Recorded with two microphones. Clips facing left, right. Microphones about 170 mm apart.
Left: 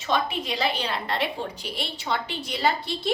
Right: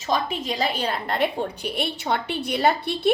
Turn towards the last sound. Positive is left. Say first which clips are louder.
# right 4 dB
turn(degrees=-60)  # may be behind; listen again after turning